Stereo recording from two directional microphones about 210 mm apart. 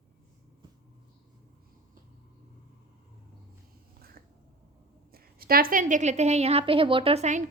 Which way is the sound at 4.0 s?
45° right (ahead or behind).